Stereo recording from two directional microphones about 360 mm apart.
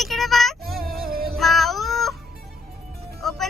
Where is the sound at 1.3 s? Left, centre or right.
Centre.